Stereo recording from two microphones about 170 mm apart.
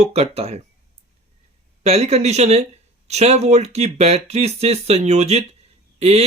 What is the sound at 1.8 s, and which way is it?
Speech, 40° right (ahead or behind).